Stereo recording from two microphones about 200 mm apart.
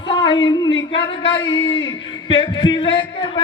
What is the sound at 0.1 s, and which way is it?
A man's voice, 25° left (ahead or behind).